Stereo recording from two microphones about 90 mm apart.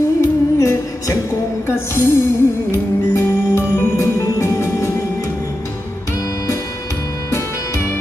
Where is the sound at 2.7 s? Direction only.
30° left (ahead or behind).